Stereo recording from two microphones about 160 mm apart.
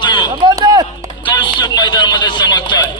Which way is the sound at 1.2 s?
30° left (ahead or behind).